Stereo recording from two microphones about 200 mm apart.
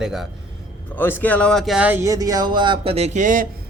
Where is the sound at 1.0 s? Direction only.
10° left (ahead or behind); by 3.4 s 40° right (ahead or behind).